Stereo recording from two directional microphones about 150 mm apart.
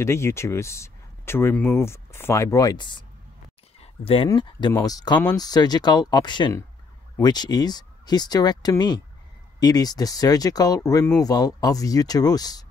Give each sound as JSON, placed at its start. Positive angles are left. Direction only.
{"t": 0.0, "sound": "speech", "side_deg": 20}
{"t": 3.8, "sound": "a sound", "side_deg": 40}
{"t": 4.4, "sound": "speech", "side_deg": 30}